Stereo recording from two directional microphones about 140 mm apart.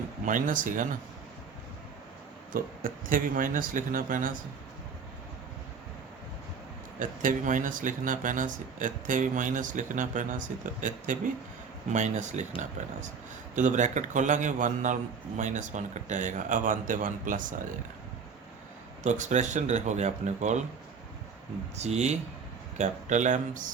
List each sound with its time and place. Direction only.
0.3 s speech: 70° right (ahead or behind)
2.5 s speech: 85° right
7.0 s a man's voice: 70° right (ahead or behind)
13.6 s a man's voice: 60° right (ahead or behind)
19.0 s a man's voice: 60° right (ahead or behind)
21.8 s a man's voice: 50° right (ahead or behind)